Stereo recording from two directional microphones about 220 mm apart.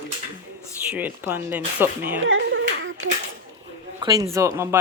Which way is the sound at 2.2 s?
60° right (ahead or behind).